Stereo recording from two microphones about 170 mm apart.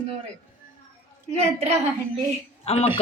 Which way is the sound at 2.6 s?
35° left (ahead or behind).